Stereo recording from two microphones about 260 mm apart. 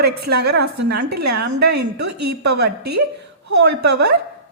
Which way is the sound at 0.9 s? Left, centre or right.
Right.